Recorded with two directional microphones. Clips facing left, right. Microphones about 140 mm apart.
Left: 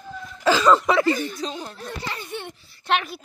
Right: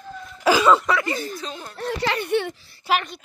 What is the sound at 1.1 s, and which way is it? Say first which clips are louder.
Speech: left 1 dB; 35° right (ahead or behind).